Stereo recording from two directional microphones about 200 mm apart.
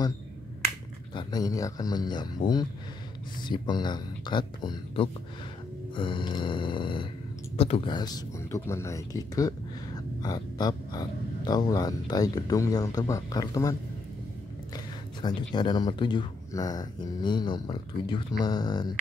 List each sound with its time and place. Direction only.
1.1 s speech: 20° left (ahead or behind)
15.2 s speech: 20° left (ahead or behind)